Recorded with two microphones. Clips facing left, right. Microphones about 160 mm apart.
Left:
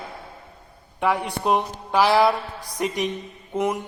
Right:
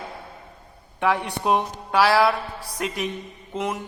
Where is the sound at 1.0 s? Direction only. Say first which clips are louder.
Even; 10° left (ahead or behind).